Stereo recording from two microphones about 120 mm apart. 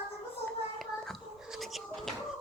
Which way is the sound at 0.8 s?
Centre (ahead or behind).